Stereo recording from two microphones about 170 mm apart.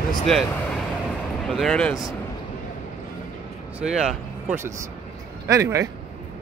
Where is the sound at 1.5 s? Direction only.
5° left (ahead or behind).